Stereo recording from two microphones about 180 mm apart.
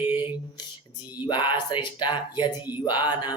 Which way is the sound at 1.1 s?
25° left (ahead or behind).